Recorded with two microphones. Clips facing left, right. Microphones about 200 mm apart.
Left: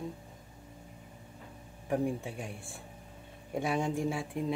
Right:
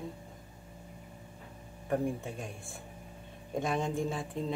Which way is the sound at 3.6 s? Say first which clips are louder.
Left 1 dB; 10° left (ahead or behind).